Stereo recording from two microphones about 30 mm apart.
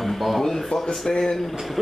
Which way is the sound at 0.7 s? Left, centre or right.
Left.